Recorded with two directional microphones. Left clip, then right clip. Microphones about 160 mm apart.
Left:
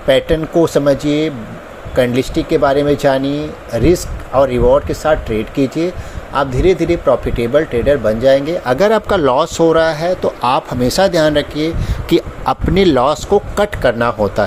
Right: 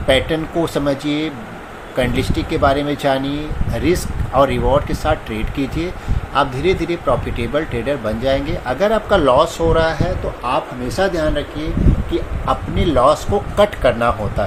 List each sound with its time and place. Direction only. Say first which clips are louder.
0.1 s speech: left 4 dB; 40° left (ahead or behind)
10.4 s speech: left 4 dB; 70° left (ahead or behind)
12.1 s speech: left 7 dB; 90° left; by 14.4 s 60° left (ahead or behind)